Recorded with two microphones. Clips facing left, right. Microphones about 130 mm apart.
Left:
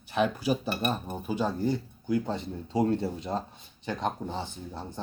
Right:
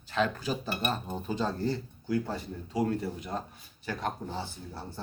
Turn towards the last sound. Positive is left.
turn(degrees=20)  # may be behind; listen again after turning